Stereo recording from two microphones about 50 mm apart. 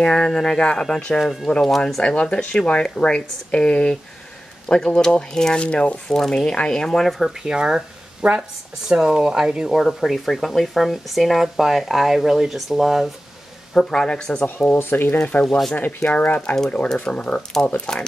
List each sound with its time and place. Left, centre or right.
0.0 s speech: centre
1.2 s speech: centre
1.5 s speech: centre
7.4 s speech: centre
9.8 s speech: centre
13.7 s speech: centre
14.7 s speech: left
15.1 s speech: left
15.4 s speech: centre
16.0 s speech: left